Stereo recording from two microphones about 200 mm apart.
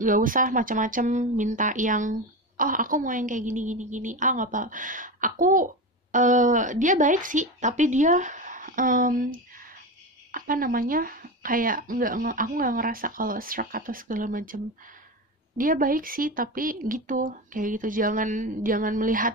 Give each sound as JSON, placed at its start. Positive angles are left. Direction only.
{"t": 0.0, "sound": "speech", "side_deg": -45}